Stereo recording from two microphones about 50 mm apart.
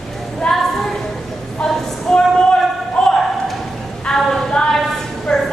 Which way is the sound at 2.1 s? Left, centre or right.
Centre.